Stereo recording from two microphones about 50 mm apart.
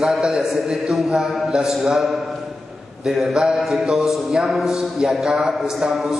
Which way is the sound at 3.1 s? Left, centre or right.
Centre.